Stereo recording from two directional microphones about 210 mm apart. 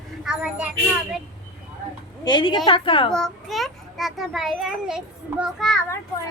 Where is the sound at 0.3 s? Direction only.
5° right (ahead or behind).